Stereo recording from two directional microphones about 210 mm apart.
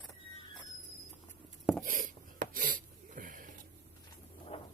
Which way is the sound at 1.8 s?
40° right (ahead or behind).